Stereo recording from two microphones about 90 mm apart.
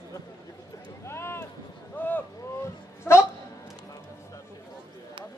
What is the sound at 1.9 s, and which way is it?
Boat, 20° left (ahead or behind).